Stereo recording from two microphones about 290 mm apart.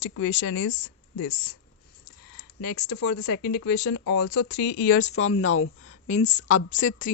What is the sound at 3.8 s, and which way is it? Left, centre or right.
Speech, left.